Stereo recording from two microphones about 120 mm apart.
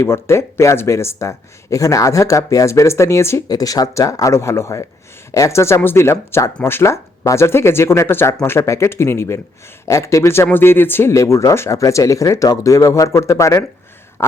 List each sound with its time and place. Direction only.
0.0 s speech: 20° left (ahead or behind)
14.2 s throat clearing: 25° left (ahead or behind)